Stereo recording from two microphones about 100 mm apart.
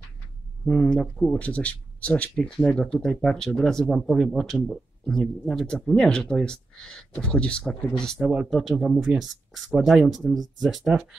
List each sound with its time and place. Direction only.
0.7 s speech: 10° left (ahead or behind)